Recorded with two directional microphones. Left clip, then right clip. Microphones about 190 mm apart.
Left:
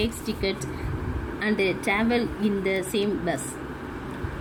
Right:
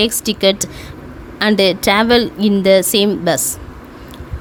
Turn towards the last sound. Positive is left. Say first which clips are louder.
# right 12 dB
turn(degrees=-60)  # may be behind; listen again after turning